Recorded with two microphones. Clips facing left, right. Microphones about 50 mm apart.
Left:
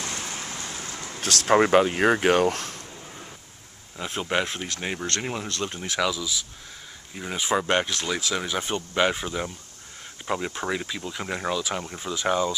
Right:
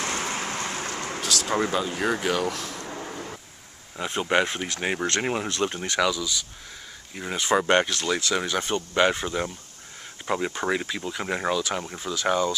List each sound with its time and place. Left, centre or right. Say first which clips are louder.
0.0 s vehicle: right 5 dB; right
1.2 s speech: left 3 dB; left
1.5 s speech: left 9 dB; left
2.9 s vehicle: right 7 dB; right
4.0 s speech: right 3 dB; centre
5.9 s speech: left 1 dB; centre
7.5 s speech: right 3 dB; centre